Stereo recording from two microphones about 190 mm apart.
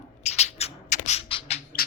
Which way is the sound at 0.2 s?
35° left (ahead or behind).